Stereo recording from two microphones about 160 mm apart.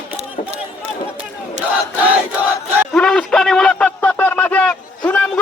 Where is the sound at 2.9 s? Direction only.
5° left (ahead or behind).